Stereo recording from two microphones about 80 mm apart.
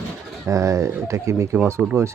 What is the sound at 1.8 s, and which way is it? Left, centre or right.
Speech, centre.